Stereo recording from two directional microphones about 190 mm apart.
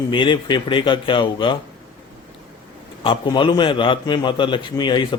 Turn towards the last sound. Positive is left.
turn(degrees=25)  # may be behind; listen again after turning